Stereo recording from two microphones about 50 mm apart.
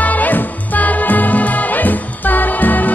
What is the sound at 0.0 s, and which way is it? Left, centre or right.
Music, left.